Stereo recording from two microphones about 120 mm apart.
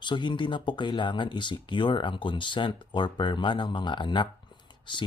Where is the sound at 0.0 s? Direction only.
40° left (ahead or behind).